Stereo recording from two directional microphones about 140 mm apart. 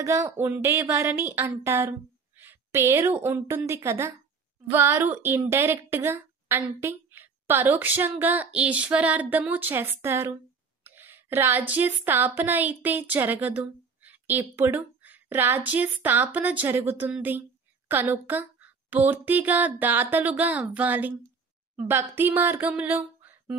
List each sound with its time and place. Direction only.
0.0 s a woman's voice: 20° right (ahead or behind)